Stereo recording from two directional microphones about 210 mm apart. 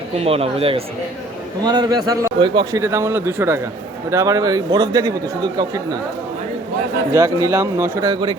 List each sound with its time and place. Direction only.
0.2 s a man's voice: 30° right (ahead or behind)
7.1 s a man's voice: 15° right (ahead or behind)